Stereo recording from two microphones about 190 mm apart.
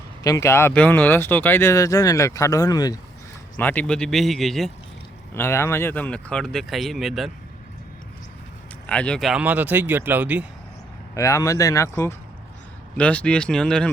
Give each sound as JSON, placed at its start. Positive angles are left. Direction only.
{"t": 0.2, "sound": "speech", "side_deg": 15}
{"t": 3.6, "sound": "speech", "side_deg": 10}
{"t": 5.3, "sound": "speech", "side_deg": 15}
{"t": 8.9, "sound": "speech", "side_deg": 5}
{"t": 11.1, "sound": "speech", "side_deg": 15}